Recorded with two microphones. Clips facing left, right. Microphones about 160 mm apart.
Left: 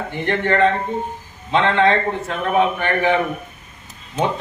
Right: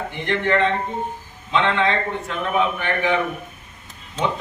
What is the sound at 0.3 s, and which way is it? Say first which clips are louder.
A man's voice: left 3 dB; 45° left (ahead or behind).